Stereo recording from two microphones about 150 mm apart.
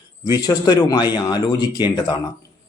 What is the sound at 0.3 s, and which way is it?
Speech, 25° left (ahead or behind).